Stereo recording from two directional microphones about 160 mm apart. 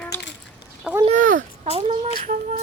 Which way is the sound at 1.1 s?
55° right (ahead or behind).